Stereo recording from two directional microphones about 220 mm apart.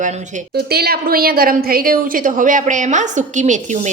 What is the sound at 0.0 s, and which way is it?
Speech, 35° right (ahead or behind).